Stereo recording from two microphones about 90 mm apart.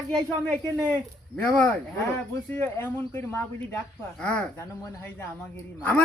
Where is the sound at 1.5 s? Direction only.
15° left (ahead or behind).